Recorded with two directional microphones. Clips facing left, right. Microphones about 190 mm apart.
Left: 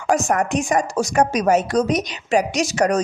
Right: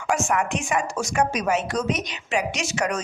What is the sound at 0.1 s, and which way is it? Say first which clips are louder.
A woman's voice: left 5 dB; 40° left (ahead or behind).